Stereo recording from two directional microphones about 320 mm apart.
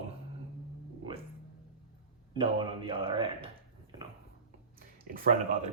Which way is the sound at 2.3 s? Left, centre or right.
Centre.